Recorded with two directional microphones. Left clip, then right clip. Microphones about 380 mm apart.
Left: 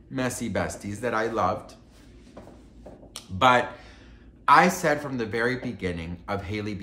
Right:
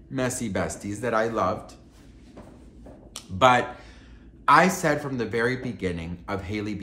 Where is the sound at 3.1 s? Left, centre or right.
Centre.